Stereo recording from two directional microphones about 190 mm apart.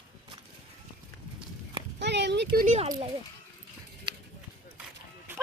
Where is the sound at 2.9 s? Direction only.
25° right (ahead or behind).